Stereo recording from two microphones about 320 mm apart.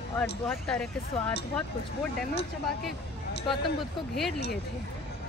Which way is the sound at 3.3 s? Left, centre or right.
Centre.